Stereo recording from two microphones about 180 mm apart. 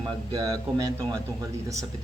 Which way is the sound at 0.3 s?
20° right (ahead or behind).